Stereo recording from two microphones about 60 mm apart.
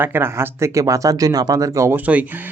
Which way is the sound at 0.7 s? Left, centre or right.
Right.